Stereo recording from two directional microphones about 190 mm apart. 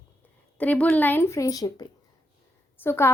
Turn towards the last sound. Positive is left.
turn(degrees=10)  # may be behind; listen again after turning